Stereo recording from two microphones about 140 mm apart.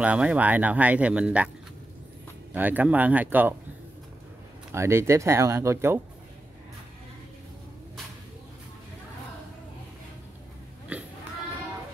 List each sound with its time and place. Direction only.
0.0 s speech: 10° right (ahead or behind)
2.5 s speech: 10° right (ahead or behind)
4.7 s speech: 20° right (ahead or behind)